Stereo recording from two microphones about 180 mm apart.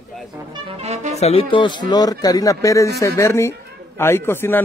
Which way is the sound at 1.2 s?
30° left (ahead or behind).